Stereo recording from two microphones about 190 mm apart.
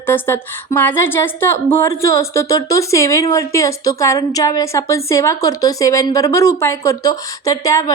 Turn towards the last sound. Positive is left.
turn(degrees=15)  # may be behind; listen again after turning